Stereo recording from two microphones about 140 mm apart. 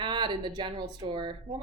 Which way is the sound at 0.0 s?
35° right (ahead or behind).